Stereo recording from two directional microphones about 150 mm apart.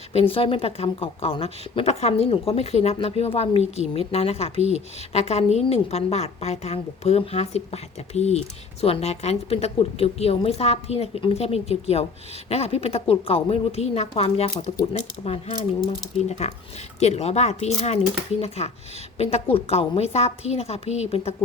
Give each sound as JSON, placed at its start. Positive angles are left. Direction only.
{"t": 0.1, "sound": "a woman's voice", "side_deg": 40}